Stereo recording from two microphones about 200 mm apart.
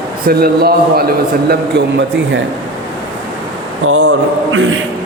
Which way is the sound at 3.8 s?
75° right (ahead or behind).